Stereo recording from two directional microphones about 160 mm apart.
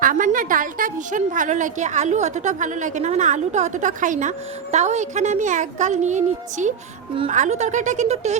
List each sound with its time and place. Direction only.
0.0 s a woman's voice: 55° right (ahead or behind)